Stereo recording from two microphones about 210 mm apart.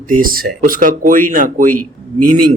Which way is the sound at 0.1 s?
40° right (ahead or behind).